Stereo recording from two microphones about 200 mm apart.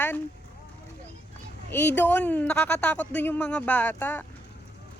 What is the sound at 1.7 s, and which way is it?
A woman's voice, 10° left (ahead or behind).